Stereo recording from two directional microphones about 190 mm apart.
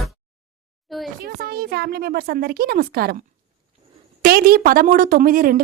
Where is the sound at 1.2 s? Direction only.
55° right (ahead or behind).